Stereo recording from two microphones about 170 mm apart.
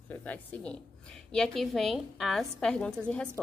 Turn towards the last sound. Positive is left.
turn(degrees=5)  # may be behind; listen again after turning